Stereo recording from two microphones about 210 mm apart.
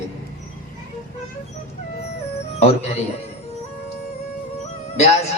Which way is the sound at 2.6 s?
30° left (ahead or behind).